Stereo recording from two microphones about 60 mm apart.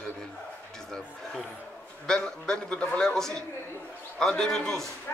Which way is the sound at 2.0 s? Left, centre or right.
Centre.